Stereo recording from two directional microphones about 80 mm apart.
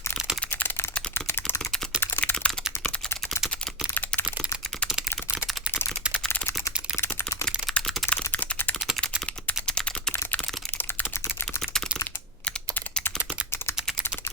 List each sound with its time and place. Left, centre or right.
1.1 s typing: left
2.3 s typing: centre
3.9 s typing: left
4.9 s typing: centre
5.4 s a sound: left
6.4 s typing: left
7.4 s typing: centre
8.3 s typing: left
12.5 s computer keyboard: centre